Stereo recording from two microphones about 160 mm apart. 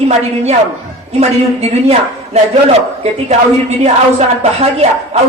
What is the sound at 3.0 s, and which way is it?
A woman's voice, 45° right (ahead or behind).